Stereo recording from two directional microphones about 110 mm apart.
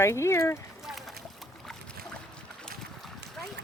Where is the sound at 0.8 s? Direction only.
Centre (ahead or behind).